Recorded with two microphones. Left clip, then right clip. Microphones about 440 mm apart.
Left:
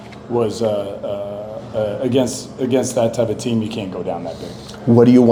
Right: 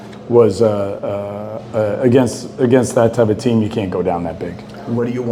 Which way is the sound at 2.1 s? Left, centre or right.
Right.